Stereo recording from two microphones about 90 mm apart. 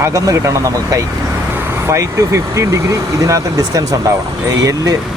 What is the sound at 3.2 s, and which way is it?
Speech, 40° right (ahead or behind).